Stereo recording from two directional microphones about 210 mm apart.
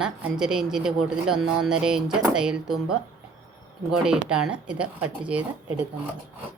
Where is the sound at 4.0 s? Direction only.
5° right (ahead or behind).